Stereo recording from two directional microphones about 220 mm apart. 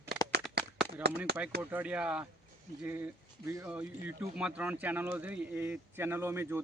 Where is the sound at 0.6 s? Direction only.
50° right (ahead or behind).